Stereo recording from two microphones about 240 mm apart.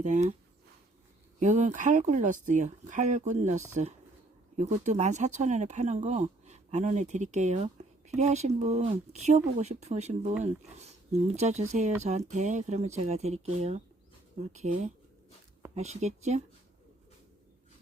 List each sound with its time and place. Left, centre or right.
0.0 s speech: right
1.4 s speech: right